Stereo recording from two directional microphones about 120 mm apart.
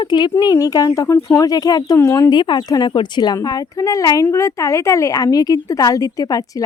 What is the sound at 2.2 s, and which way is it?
Speech, 35° left (ahead or behind).